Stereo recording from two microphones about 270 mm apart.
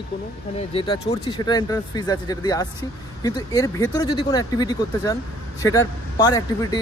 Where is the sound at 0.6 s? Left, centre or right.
Left.